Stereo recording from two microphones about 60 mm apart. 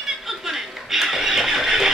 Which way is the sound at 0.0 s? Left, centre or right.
Centre.